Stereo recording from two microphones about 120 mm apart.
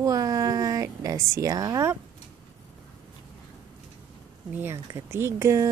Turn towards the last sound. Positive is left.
turn(degrees=-25)  # may be behind; listen again after turning